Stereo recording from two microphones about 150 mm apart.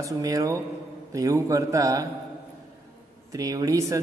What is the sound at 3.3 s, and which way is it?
Speech, 25° right (ahead or behind).